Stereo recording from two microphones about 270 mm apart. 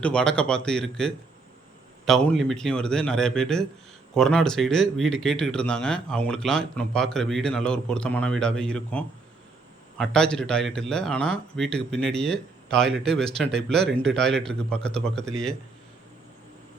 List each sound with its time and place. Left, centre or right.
0.0 s speech: centre